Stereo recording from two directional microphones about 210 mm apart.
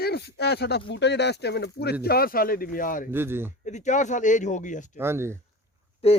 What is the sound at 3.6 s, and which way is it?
Speech, 35° left (ahead or behind).